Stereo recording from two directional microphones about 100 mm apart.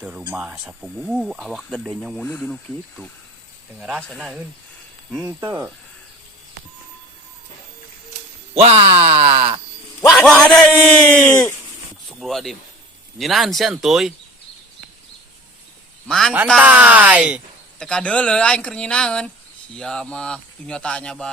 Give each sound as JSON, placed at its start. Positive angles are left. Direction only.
{"t": 0.0, "sound": "speech", "side_deg": -10}
{"t": 2.2, "sound": "speech", "side_deg": 20}
{"t": 3.8, "sound": "speech", "side_deg": -5}
{"t": 5.2, "sound": "speech", "side_deg": -25}
{"t": 8.6, "sound": "speech", "side_deg": -85}
{"t": 10.2, "sound": "speech", "side_deg": 10}
{"t": 12.2, "sound": "speech", "side_deg": 0}
{"t": 16.0, "sound": "speech", "side_deg": 5}
{"t": 16.6, "sound": "speech", "side_deg": -15}
{"t": 17.7, "sound": "speech", "side_deg": 10}